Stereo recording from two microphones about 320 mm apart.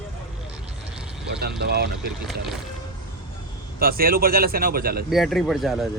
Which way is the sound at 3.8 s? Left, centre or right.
Right.